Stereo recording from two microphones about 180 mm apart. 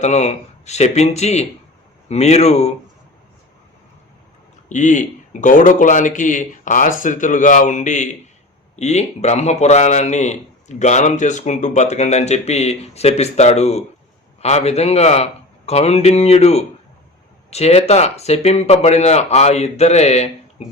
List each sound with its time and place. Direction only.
0.0 s a man's voice: 40° left (ahead or behind)
4.7 s a man's voice: 45° left (ahead or behind)